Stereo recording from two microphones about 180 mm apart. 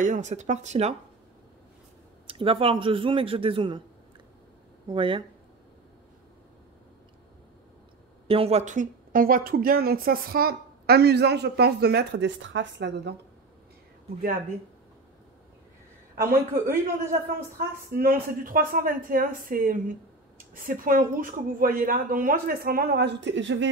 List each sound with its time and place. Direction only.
0.0 s speech: 40° right (ahead or behind)
2.2 s a man's voice: 30° right (ahead or behind)
4.8 s a man's voice: 30° right (ahead or behind)
8.3 s a woman's voice: 35° right (ahead or behind); by 13.1 s 80° right
16.2 s a woman's voice: 15° right (ahead or behind)
17.9 s a woman's voice: 55° right (ahead or behind); by 23.7 s 90° right